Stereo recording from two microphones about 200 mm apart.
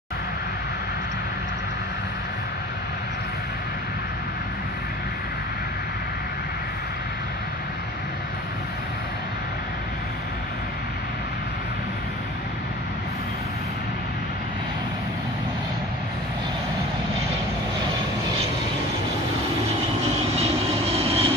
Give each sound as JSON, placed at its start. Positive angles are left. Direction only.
{"t": 20.2, "sound": "vehicle", "side_deg": -30}